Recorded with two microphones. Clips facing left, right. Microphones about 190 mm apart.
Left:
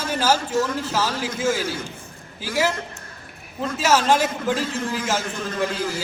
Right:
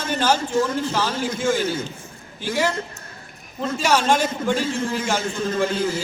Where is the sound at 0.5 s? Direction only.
25° right (ahead or behind).